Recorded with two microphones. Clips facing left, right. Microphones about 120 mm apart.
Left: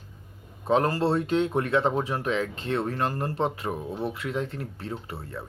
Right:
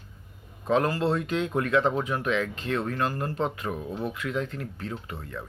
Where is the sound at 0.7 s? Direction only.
35° left (ahead or behind).